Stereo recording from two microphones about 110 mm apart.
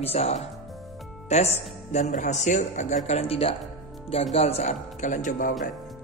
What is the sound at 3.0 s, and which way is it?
Speech, 75° left (ahead or behind).